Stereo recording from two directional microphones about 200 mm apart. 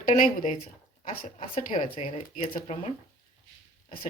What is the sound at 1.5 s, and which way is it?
Speech, 30° left (ahead or behind).